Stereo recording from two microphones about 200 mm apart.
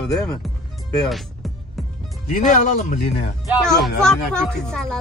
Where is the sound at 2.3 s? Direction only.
35° left (ahead or behind).